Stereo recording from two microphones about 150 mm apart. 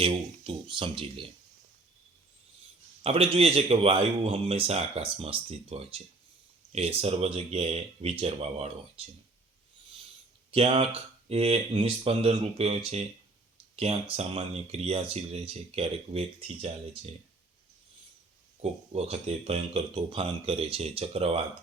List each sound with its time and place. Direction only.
0.0 s speech: 35° right (ahead or behind)
3.0 s speech: 40° right (ahead or behind)
10.5 s speech: 40° right (ahead or behind)
18.6 s speech: 45° right (ahead or behind)